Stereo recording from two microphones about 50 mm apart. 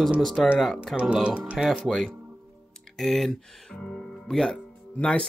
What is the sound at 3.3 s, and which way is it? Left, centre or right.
Speech, centre.